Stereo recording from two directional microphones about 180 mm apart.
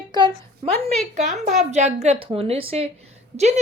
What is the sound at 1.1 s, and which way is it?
A woman's voice, 40° right (ahead or behind).